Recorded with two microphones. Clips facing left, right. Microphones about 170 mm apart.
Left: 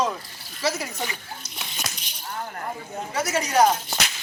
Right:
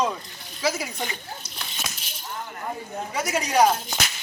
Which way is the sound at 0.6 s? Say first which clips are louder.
Even; 10° right (ahead or behind).